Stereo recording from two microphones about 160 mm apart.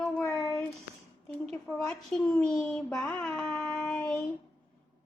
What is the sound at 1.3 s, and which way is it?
A woman's voice, 5° left (ahead or behind).